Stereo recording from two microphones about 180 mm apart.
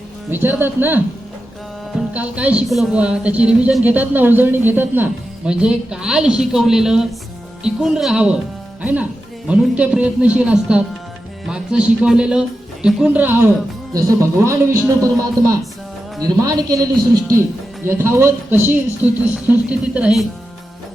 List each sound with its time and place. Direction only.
0.3 s speech: 10° right (ahead or behind)
2.1 s a man's voice: 5° right (ahead or behind)